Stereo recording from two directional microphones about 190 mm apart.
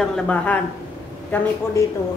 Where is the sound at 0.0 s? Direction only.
5° left (ahead or behind).